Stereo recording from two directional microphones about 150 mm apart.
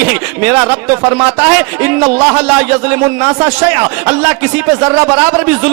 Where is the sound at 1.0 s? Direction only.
30° right (ahead or behind).